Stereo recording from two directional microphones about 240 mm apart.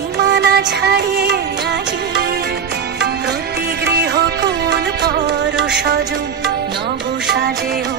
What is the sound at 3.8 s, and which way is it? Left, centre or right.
Music, right.